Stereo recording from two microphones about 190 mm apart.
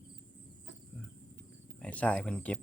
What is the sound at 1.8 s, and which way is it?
Speech, 5° left (ahead or behind).